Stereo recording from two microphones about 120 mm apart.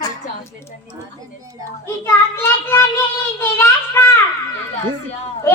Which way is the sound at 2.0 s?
20° left (ahead or behind).